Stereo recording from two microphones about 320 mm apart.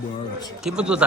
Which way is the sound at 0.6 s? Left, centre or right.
Centre.